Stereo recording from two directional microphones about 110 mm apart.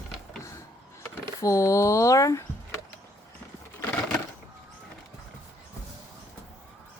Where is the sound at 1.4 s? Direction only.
30° left (ahead or behind).